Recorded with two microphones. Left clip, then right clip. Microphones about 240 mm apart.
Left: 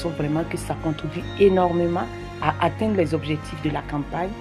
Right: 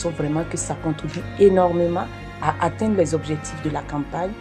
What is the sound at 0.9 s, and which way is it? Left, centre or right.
Speech, left.